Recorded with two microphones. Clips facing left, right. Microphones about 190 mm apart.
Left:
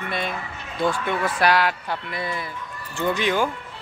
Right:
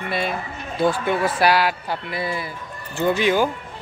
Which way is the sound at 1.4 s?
5° right (ahead or behind).